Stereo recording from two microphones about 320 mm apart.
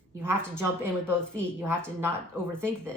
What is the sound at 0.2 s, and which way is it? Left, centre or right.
A woman's voice, centre.